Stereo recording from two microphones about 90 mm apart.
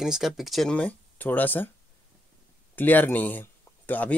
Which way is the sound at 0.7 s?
15° left (ahead or behind).